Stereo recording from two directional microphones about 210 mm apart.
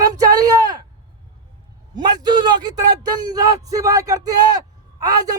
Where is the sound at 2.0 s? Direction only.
20° right (ahead or behind).